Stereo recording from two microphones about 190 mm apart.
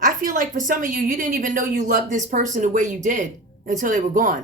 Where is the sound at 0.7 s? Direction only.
45° right (ahead or behind).